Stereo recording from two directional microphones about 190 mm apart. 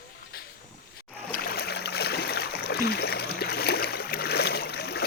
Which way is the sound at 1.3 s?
55° left (ahead or behind).